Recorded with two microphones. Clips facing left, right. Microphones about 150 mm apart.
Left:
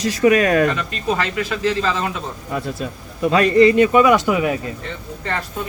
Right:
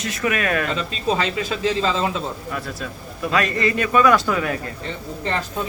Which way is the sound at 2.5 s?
25° left (ahead or behind).